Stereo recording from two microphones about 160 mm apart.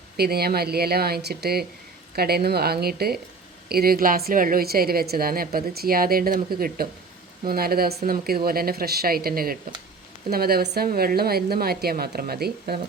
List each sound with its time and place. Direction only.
0.2 s a woman's voice: 75° right (ahead or behind)